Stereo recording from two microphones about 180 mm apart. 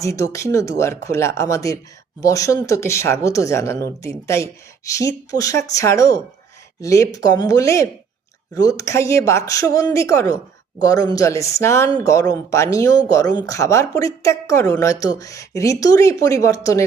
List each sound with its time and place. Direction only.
0.0 s speech: 15° left (ahead or behind)